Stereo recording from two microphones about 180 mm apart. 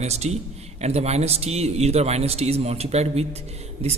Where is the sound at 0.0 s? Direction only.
35° right (ahead or behind).